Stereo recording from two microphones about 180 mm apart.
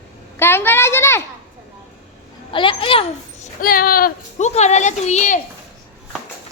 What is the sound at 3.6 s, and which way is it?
Speech, 55° left (ahead or behind).